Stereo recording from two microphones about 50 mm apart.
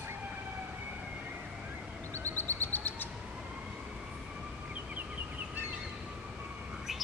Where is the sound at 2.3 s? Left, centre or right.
Left.